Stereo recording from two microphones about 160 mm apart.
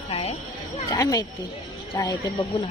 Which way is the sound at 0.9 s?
25° left (ahead or behind).